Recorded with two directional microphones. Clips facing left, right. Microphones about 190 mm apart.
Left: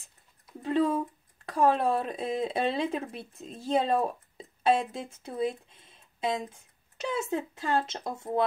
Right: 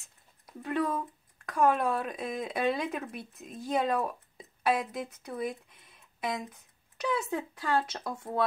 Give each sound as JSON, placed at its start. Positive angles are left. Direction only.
{"t": 0.6, "sound": "speech", "side_deg": 25}